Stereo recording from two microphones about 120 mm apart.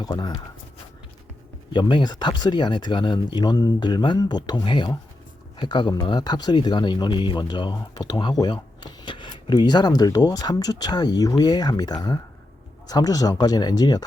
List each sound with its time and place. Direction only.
0.0 s speech: 35° left (ahead or behind)
1.7 s speech: 40° left (ahead or behind)